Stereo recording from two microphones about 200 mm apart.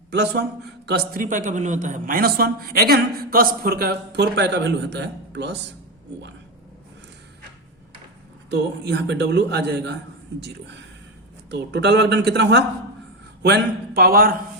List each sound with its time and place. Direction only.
0.1 s a man's voice: 55° right (ahead or behind)
8.5 s a man's voice: 60° right (ahead or behind)